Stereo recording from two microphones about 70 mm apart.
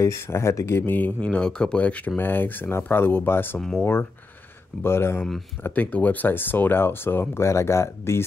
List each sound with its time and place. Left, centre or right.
0.0 s speech: left
0.8 s speech: left
5.6 s speech: left